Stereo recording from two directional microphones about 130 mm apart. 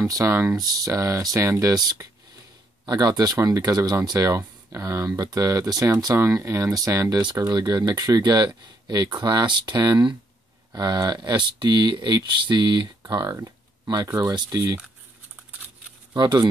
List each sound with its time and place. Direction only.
0.0 s speech: 25° right (ahead or behind)
16.1 s speech: 30° right (ahead or behind)